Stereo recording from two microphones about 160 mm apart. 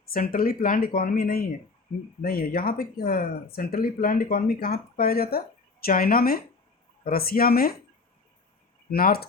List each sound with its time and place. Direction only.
0.1 s speech: 65° left (ahead or behind)
8.9 s speech: 70° left (ahead or behind)